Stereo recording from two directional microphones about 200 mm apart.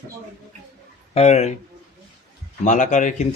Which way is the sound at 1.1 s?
35° left (ahead or behind).